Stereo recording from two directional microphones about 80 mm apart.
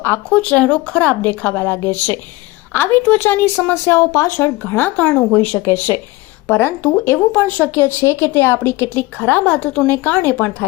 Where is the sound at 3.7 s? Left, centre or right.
Left.